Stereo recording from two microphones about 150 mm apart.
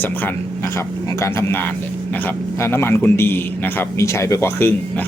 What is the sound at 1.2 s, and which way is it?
Speech, 20° left (ahead or behind).